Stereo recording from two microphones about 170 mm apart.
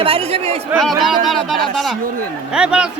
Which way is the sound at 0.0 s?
35° right (ahead or behind).